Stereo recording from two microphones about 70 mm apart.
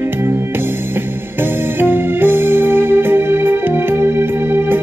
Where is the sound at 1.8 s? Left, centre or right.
Right.